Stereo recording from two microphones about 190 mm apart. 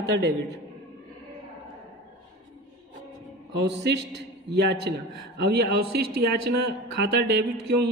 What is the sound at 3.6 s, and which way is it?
A man's voice, 60° right (ahead or behind).